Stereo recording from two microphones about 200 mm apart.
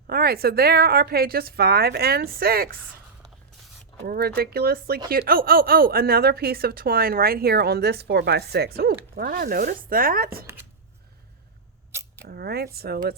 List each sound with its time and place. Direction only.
0.1 s speech: 50° right (ahead or behind)
4.0 s speech: 50° right (ahead or behind)
12.3 s speech: 50° right (ahead or behind)